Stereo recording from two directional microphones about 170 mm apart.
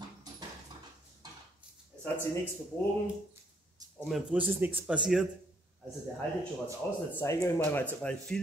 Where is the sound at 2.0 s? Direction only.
10° left (ahead or behind).